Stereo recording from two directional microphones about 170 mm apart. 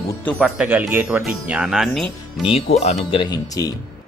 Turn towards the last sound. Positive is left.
turn(degrees=25)  # may be behind; listen again after turning